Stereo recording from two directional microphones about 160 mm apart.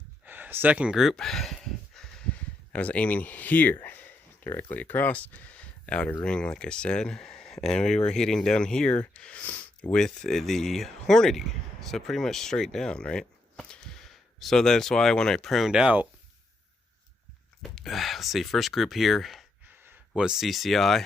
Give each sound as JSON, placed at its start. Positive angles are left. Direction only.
{"t": 0.3, "sound": "speech", "side_deg": -10}
{"t": 17.6, "sound": "speech", "side_deg": 0}
{"t": 19.6, "sound": "speech", "side_deg": -10}